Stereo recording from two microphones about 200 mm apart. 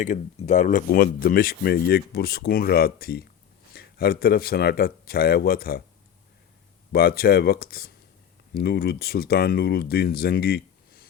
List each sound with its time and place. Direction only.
0.0 s speech: 40° left (ahead or behind)
6.9 s speech: 50° left (ahead or behind)